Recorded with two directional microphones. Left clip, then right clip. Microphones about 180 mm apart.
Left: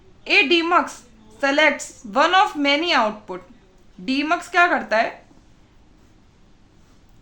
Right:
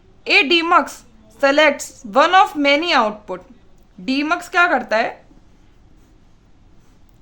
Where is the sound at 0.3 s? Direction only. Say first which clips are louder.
Right 3 dB; 30° right (ahead or behind).